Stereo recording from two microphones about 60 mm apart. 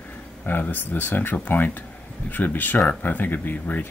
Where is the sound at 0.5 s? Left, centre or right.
Left.